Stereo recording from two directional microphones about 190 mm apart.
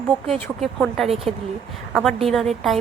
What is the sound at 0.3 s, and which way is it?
Speech, 5° left (ahead or behind).